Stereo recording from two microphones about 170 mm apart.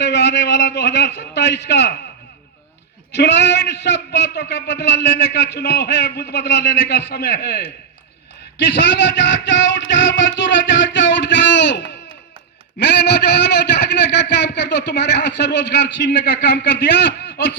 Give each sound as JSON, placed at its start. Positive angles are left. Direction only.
{"t": 0.0, "sound": "a man's voice", "side_deg": 90}
{"t": 3.1, "sound": "a man's voice", "side_deg": 90}
{"t": 8.5, "sound": "a man's voice", "side_deg": 90}